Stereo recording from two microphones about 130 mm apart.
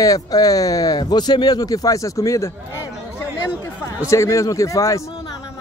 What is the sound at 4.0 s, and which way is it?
Speech, 25° left (ahead or behind).